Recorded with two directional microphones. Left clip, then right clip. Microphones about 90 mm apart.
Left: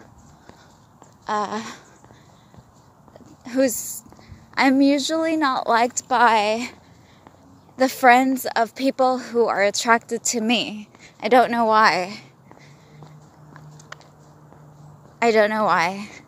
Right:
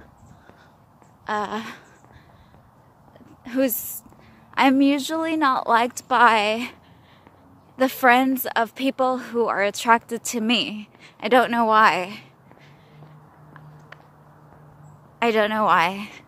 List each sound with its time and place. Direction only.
1.2 s speech: 20° right (ahead or behind)
3.4 s speech: 15° right (ahead or behind)
6.0 s a woman's voice: 25° right (ahead or behind); by 12.3 s 5° right (ahead or behind)
15.1 s speech: 5° right (ahead or behind)
15.8 s a woman's voice: 25° right (ahead or behind)